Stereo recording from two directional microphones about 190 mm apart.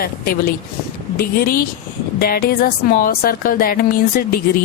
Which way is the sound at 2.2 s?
55° left (ahead or behind).